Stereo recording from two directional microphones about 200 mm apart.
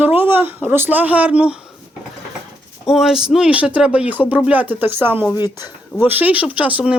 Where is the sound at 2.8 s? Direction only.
Centre (ahead or behind).